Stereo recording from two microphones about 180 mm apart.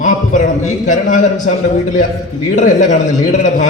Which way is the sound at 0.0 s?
45° left (ahead or behind).